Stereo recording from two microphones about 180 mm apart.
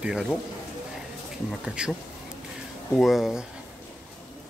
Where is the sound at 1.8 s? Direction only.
5° right (ahead or behind).